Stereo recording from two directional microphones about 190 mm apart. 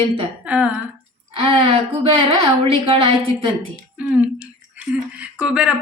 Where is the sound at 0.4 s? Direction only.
5° right (ahead or behind).